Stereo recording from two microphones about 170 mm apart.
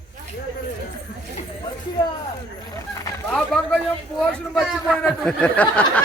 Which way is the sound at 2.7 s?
20° left (ahead or behind).